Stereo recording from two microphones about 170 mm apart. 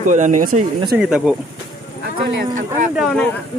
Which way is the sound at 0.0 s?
45° right (ahead or behind).